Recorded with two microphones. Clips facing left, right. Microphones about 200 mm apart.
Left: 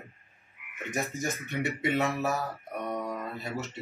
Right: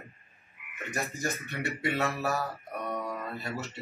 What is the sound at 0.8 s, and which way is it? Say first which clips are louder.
Frog: left 2 dB; centre (ahead or behind).